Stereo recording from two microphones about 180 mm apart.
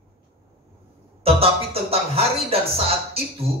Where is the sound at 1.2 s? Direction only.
35° right (ahead or behind).